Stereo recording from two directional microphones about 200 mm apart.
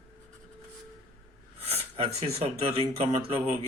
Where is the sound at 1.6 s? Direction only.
30° right (ahead or behind).